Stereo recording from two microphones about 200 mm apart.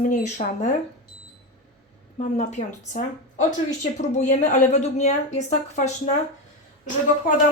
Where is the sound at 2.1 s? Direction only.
35° left (ahead or behind).